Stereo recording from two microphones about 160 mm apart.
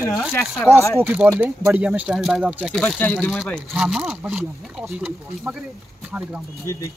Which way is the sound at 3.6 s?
5° right (ahead or behind).